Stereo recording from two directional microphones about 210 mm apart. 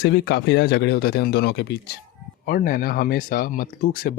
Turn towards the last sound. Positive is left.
turn(degrees=45)  # may be behind; listen again after turning